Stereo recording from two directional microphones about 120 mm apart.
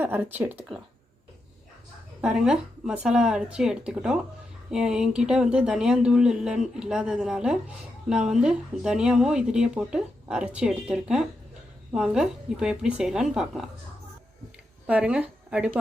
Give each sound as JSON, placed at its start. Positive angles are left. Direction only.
{"t": 0.0, "sound": "speech", "side_deg": -15}
{"t": 2.2, "sound": "speech", "side_deg": -5}
{"t": 14.8, "sound": "speech", "side_deg": -10}